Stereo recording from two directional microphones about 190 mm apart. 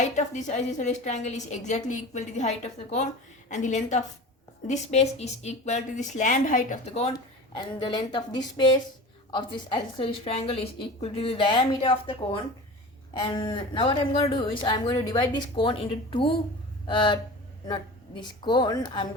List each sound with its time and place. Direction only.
0.0 s a woman's voice: 40° left (ahead or behind)
7.1 s a woman's voice: 25° left (ahead or behind)